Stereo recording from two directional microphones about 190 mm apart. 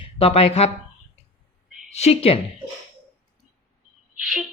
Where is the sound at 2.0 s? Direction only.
30° left (ahead or behind).